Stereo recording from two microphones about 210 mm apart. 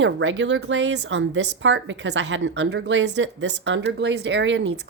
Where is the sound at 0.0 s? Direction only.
60° right (ahead or behind).